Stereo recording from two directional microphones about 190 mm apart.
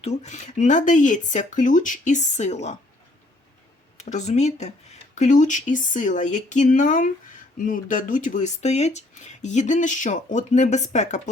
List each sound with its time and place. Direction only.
0.0 s speech: 35° left (ahead or behind)
3.9 s speech: 40° left (ahead or behind)